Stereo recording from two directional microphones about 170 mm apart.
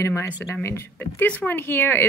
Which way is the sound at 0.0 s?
15° left (ahead or behind).